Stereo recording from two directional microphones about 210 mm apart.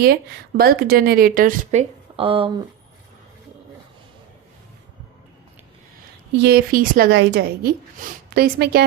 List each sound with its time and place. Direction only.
0.0 s speech: 45° right (ahead or behind)
2.1 s speech: 25° right (ahead or behind)
6.4 s speech: 45° right (ahead or behind)